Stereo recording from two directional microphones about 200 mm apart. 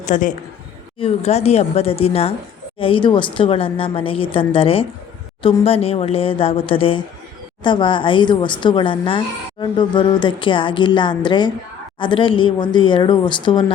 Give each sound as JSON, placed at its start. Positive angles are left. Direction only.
{"t": 0.0, "sound": "a woman's voice", "side_deg": 40}